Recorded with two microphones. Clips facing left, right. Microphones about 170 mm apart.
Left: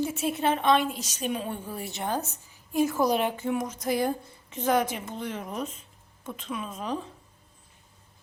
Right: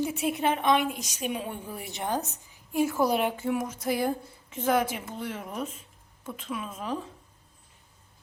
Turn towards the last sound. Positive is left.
turn(degrees=-5)  # may be behind; listen again after turning